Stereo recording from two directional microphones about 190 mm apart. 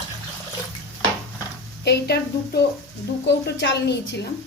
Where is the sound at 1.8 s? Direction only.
60° left (ahead or behind).